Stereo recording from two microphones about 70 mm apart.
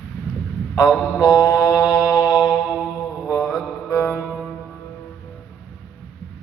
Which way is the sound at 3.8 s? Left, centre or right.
Left.